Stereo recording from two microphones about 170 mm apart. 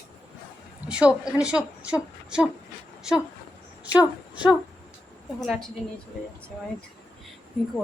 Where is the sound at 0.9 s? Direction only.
5° right (ahead or behind).